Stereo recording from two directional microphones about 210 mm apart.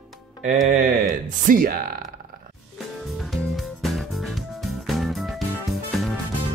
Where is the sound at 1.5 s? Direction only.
45° right (ahead or behind).